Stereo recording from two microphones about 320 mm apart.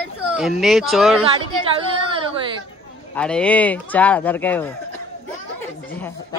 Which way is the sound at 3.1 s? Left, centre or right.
Centre.